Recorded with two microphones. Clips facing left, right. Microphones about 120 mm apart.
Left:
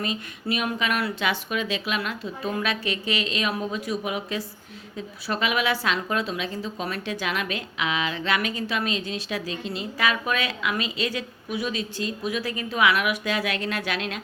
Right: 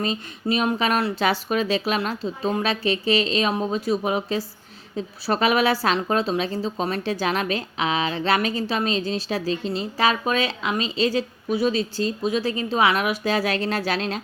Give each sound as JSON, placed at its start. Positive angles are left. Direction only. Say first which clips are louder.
{"t": 0.0, "sound": "a woman's voice", "louder": "right 4 dB", "side_deg": -30}